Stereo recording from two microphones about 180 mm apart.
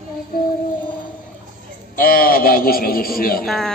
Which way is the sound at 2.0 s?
55° left (ahead or behind).